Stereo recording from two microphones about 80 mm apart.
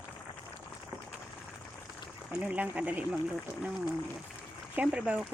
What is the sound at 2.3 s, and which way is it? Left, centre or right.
Speech, centre.